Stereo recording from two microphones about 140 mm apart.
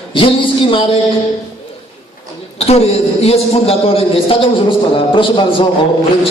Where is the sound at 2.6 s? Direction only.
50° left (ahead or behind).